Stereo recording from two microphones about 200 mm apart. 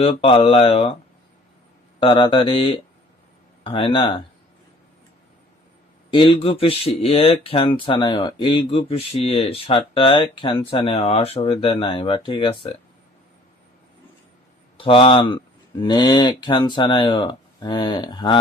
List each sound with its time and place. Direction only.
0.0 s speech: 25° left (ahead or behind)
2.0 s speech: 25° left (ahead or behind)
6.1 s speech: 25° left (ahead or behind)
14.8 s speech: 25° left (ahead or behind)